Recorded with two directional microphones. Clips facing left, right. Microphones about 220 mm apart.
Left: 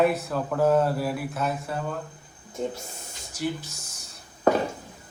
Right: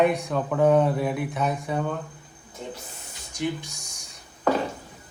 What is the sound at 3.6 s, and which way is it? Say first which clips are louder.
Speech: right 1 dB; 15° right (ahead or behind).